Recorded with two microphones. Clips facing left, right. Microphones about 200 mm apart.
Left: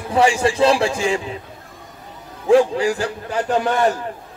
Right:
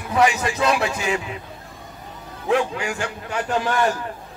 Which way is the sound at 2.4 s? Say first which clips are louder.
Left 7 dB; 35° left (ahead or behind).